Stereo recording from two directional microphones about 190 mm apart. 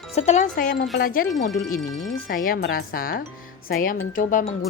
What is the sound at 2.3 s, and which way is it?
Speech, 50° left (ahead or behind).